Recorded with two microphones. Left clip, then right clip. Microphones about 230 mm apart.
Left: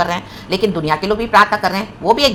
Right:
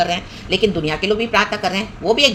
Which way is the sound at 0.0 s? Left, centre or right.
Centre.